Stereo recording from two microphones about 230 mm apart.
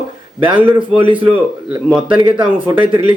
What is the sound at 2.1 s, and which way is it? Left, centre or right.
Speech, right.